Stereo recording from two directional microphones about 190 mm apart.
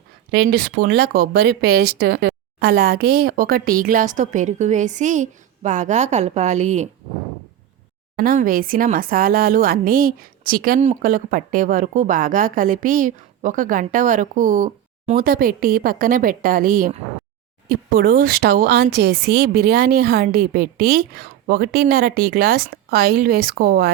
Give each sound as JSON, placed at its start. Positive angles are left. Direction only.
{"t": 0.3, "sound": "speech", "side_deg": -55}
{"t": 8.1, "sound": "speech", "side_deg": -50}